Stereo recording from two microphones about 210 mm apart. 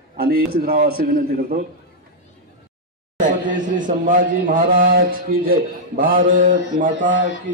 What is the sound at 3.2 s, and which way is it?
A man's voice, 35° right (ahead or behind).